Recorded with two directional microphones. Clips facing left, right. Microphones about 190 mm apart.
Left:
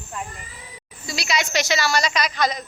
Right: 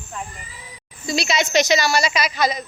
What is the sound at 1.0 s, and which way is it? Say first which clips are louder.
A woman's voice: right 4 dB; 25° right (ahead or behind).